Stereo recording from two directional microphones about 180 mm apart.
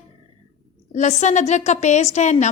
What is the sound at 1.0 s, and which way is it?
A woman's voice, 40° left (ahead or behind).